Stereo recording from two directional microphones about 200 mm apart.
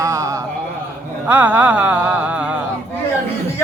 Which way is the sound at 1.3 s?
10° right (ahead or behind).